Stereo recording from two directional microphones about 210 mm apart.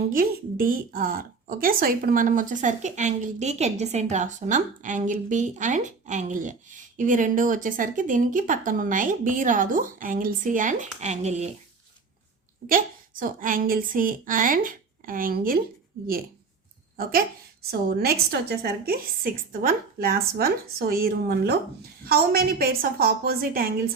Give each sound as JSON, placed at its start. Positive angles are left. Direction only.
{"t": 0.1, "sound": "speech", "side_deg": -45}
{"t": 12.6, "sound": "speech", "side_deg": -40}
{"t": 17.0, "sound": "a woman's voice", "side_deg": -45}